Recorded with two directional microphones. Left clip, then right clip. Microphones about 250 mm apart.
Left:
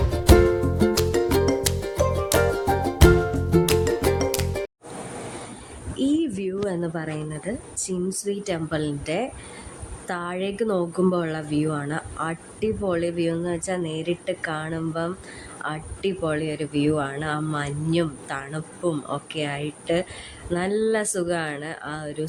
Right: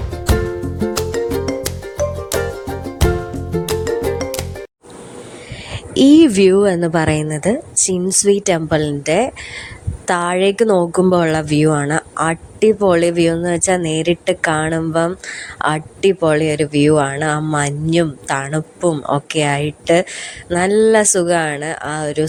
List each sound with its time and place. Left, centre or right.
0.1 s music: centre
6.0 s a woman's voice: right